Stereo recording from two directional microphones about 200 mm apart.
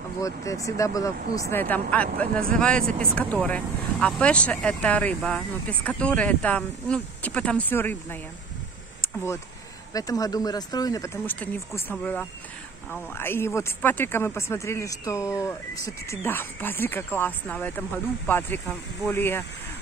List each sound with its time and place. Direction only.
0.2 s speech: 15° left (ahead or behind)